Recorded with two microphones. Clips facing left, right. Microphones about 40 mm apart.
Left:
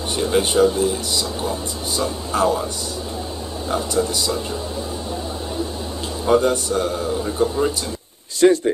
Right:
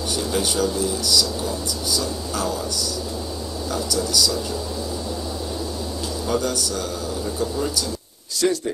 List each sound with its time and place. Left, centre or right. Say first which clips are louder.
0.1 s speech: left 6 dB; left
3.7 s speech: left 3 dB; left
6.2 s speech: left 8 dB; left